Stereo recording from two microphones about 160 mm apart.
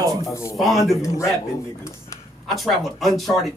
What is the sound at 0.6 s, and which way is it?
Speech, centre (ahead or behind).